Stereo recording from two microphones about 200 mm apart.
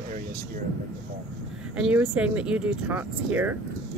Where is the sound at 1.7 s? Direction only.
5° right (ahead or behind).